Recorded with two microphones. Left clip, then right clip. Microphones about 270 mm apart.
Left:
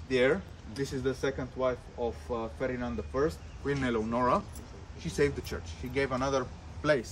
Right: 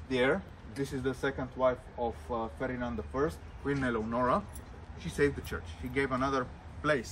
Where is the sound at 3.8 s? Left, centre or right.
Centre.